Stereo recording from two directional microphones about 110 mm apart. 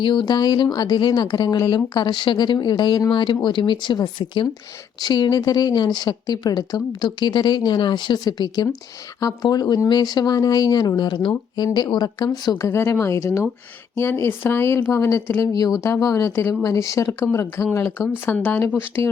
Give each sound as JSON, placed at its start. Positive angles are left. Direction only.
{"t": 0.0, "sound": "speech", "side_deg": 45}